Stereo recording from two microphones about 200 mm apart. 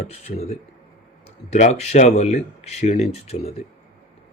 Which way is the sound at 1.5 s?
35° left (ahead or behind).